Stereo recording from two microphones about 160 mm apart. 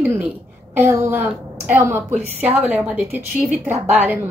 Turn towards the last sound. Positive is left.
turn(degrees=-10)  # may be behind; listen again after turning